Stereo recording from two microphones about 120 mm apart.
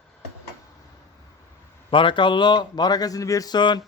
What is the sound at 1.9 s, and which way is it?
A man's voice, 45° left (ahead or behind).